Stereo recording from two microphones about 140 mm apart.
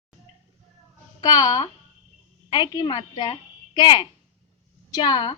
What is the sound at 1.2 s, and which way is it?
A child's voice, 30° left (ahead or behind).